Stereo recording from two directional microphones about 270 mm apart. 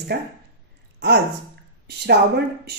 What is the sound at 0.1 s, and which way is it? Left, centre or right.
Speech, right.